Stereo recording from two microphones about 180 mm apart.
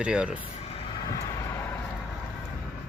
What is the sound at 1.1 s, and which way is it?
Vehicle, 20° left (ahead or behind).